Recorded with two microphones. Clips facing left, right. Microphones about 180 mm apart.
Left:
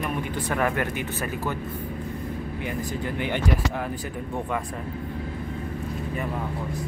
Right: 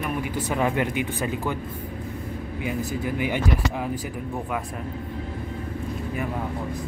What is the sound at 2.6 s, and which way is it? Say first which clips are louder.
Speech: right 4 dB; 10° right (ahead or behind).